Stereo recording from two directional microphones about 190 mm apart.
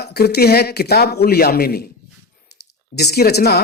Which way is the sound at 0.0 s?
60° left (ahead or behind).